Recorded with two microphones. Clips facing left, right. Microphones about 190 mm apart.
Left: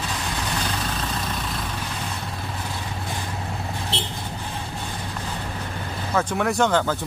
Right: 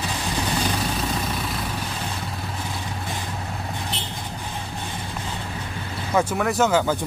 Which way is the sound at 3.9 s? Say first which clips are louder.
Left 3 dB; 30° left (ahead or behind).